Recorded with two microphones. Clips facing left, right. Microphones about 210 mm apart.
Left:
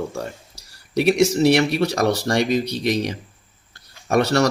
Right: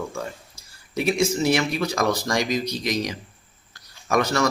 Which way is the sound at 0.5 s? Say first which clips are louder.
Left 7 dB; 75° left (ahead or behind).